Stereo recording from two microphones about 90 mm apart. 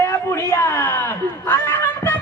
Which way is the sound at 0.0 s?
30° left (ahead or behind).